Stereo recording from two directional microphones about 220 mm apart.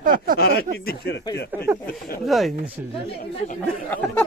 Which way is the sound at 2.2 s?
Centre (ahead or behind).